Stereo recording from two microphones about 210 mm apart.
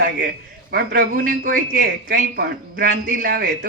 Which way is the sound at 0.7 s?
45° right (ahead or behind).